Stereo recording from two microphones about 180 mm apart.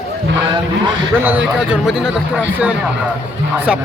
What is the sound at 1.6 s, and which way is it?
Speech, 5° right (ahead or behind).